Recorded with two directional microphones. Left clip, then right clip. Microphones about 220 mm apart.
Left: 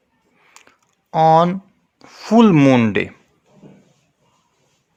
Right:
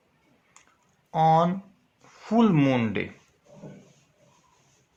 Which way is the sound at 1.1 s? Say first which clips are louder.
Left 8 dB; 45° left (ahead or behind).